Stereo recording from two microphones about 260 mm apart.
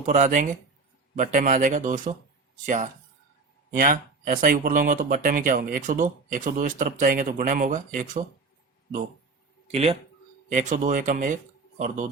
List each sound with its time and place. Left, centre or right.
0.0 s speech: right
9.7 s speech: right